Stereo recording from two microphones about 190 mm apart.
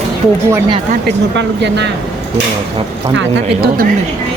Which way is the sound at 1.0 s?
65° right (ahead or behind).